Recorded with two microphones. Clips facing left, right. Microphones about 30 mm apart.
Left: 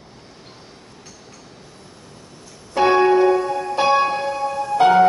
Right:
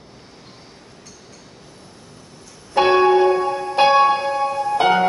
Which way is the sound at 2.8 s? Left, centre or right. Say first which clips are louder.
Even; centre.